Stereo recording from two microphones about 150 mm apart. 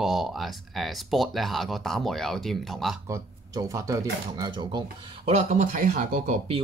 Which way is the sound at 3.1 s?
20° right (ahead or behind).